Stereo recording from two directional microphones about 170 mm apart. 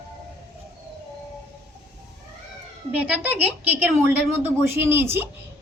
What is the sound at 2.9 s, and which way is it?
A woman's voice, 10° right (ahead or behind).